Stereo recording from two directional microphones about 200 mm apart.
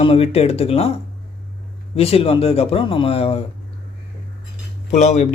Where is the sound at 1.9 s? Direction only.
30° left (ahead or behind).